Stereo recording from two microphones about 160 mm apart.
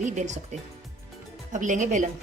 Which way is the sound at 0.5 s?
45° right (ahead or behind).